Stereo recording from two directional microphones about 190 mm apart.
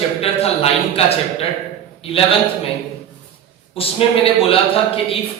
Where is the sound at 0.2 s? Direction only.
30° left (ahead or behind).